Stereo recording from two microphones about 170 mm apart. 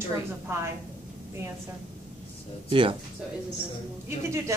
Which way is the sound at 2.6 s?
30° right (ahead or behind).